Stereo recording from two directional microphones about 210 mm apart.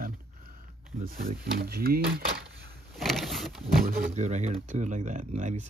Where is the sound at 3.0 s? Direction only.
Centre (ahead or behind).